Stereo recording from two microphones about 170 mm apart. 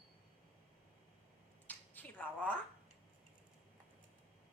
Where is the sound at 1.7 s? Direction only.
10° left (ahead or behind).